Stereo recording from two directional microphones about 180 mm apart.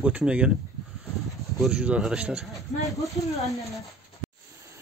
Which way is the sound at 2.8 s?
15° left (ahead or behind).